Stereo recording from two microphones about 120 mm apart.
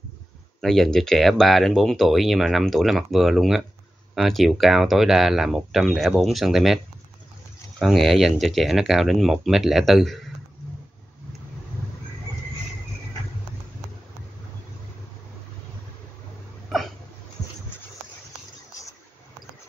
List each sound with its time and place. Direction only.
0.6 s speech: 5° left (ahead or behind)
7.8 s speech: centre (ahead or behind)
16.6 s hiccup: centre (ahead or behind)